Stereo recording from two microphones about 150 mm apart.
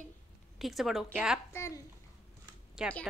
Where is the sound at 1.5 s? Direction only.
20° left (ahead or behind).